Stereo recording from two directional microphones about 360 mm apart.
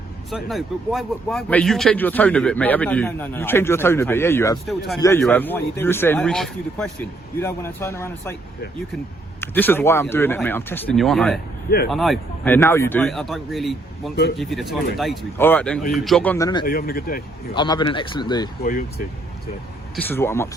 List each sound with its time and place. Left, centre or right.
0.3 s speech: centre
9.4 s speech: centre
16.6 s speech: left
17.5 s speech: centre
18.7 s speech: left
20.1 s speech: centre